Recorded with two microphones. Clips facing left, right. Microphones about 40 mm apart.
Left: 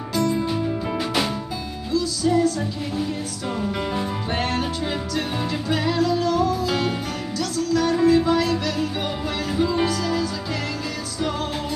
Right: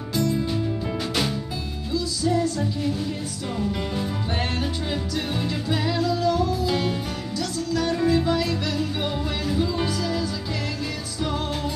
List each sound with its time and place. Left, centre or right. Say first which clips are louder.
0.1 s music: left 2 dB; centre
3.5 s music: left 2 dB; centre
5.4 s music: left 2 dB; centre
9.5 s music: left 4 dB; centre
9.8 s music: left 3 dB; centre